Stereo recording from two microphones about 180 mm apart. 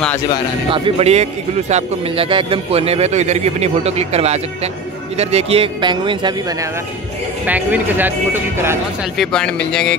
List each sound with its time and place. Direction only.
0.7 s speech: 30° right (ahead or behind)
7.4 s speech: 10° right (ahead or behind)
9.2 s speech: 5° left (ahead or behind)